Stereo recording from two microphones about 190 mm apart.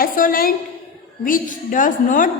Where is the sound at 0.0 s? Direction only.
50° left (ahead or behind).